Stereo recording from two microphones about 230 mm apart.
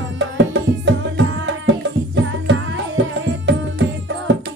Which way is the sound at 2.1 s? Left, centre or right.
Right.